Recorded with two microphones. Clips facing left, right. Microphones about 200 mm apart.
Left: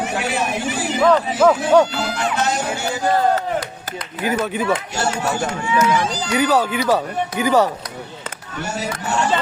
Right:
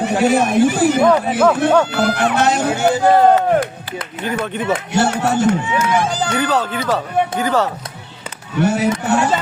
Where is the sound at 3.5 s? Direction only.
55° right (ahead or behind).